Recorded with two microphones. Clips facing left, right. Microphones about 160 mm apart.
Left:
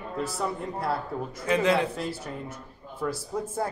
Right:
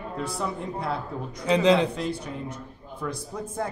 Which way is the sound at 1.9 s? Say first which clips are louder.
Right 2 dB; 5° left (ahead or behind).